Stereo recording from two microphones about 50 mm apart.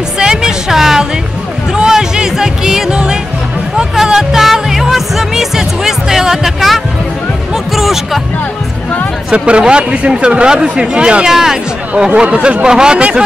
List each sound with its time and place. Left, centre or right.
0.2 s music: centre
9.3 s speech: right